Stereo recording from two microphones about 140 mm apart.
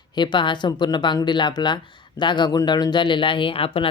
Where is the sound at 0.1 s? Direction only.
35° left (ahead or behind).